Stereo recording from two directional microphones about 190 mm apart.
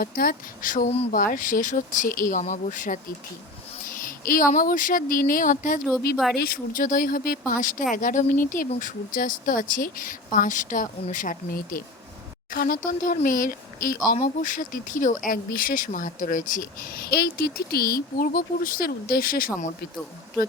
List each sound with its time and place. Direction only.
0.0 s speech: 50° left (ahead or behind)
4.0 s a sound: 45° left (ahead or behind)
4.5 s speech: 45° left (ahead or behind)